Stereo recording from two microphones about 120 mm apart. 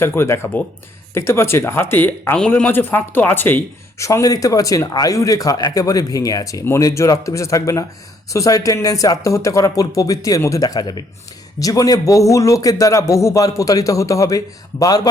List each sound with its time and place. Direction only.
0.0 s speech: 20° left (ahead or behind)